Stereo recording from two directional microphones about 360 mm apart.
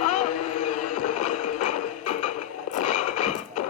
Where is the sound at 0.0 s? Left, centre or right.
Left.